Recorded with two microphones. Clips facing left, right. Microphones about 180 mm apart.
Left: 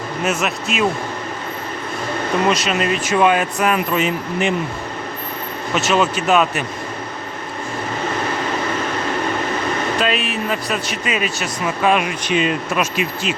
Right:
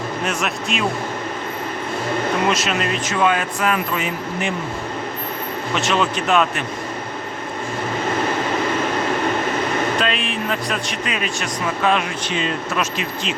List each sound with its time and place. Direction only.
0.3 s speech: 5° left (ahead or behind)
2.5 s speech: centre (ahead or behind); by 4.5 s 20° left (ahead or behind)
5.7 s speech: 5° left (ahead or behind)
10.0 s speech: 5° left (ahead or behind)